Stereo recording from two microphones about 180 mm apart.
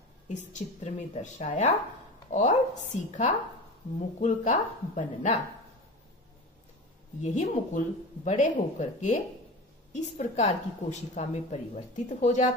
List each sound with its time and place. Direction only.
0.3 s a woman's voice: 40° left (ahead or behind)
7.2 s a woman's voice: 40° left (ahead or behind)